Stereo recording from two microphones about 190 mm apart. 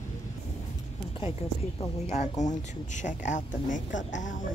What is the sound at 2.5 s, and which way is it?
Speech, 40° left (ahead or behind).